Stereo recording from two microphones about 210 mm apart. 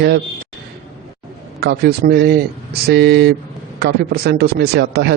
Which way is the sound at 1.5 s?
50° right (ahead or behind).